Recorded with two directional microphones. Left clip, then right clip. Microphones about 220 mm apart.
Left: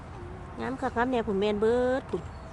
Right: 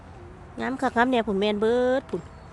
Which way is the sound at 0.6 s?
35° right (ahead or behind).